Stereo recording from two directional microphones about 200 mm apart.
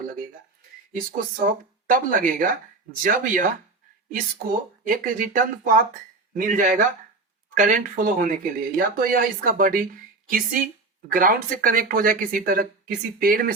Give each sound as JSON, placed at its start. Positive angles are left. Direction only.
{"t": 0.9, "sound": "speech", "side_deg": -45}